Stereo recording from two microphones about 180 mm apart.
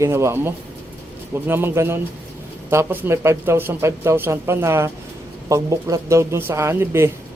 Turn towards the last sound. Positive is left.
turn(degrees=-15)  # may be behind; listen again after turning